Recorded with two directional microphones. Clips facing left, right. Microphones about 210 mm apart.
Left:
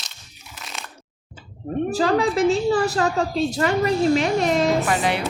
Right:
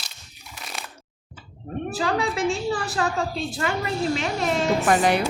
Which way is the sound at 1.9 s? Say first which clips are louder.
Left 5 dB; 40° left (ahead or behind).